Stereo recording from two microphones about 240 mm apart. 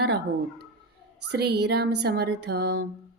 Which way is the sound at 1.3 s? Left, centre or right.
Right.